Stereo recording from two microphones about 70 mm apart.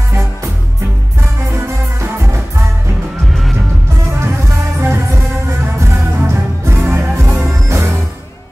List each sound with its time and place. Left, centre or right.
1.5 s music: right
4.2 s music: right